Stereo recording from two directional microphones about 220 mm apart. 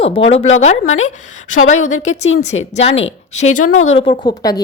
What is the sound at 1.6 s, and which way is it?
A woman's voice, 30° left (ahead or behind).